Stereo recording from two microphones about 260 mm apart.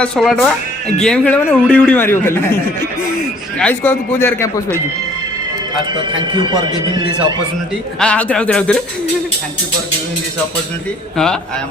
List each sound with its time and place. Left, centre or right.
0.0 s a man's voice: centre
3.6 s a man's voice: centre
6.1 s a man's voice: centre
7.9 s speech: centre